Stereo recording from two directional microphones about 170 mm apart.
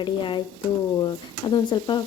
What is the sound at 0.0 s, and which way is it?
Speech, 30° left (ahead or behind).